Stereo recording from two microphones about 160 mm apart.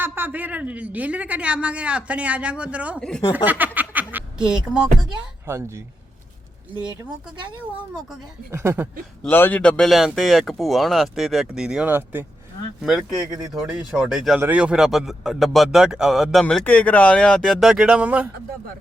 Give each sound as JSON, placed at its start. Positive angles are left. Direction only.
{"t": 0.0, "sound": "a woman's voice", "side_deg": -15}
{"t": 5.5, "sound": "a woman's voice", "side_deg": -15}
{"t": 8.4, "sound": "a woman's voice", "side_deg": -15}
{"t": 9.2, "sound": "a man's voice", "side_deg": 10}